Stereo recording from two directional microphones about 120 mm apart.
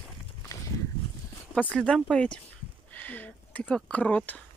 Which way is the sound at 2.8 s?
15° left (ahead or behind).